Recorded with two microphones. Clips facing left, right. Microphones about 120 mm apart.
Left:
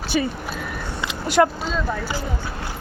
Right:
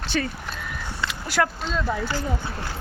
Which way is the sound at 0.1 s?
10° left (ahead or behind).